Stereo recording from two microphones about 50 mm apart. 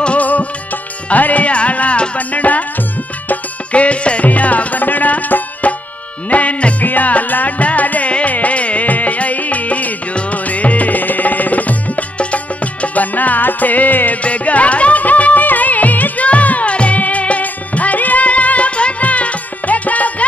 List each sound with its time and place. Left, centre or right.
0.0 s music: left